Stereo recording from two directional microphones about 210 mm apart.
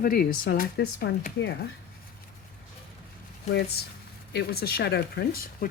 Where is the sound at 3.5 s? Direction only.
50° left (ahead or behind).